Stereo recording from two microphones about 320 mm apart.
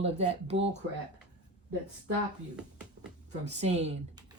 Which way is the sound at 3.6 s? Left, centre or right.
Centre.